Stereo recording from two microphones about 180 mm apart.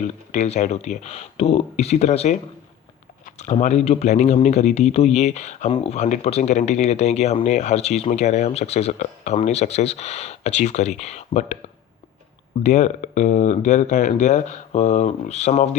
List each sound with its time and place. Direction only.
0.0 s speech: 45° left (ahead or behind)
12.6 s speech: 40° left (ahead or behind)